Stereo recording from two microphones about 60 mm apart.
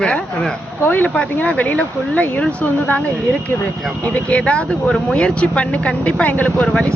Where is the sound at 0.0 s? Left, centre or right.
Centre.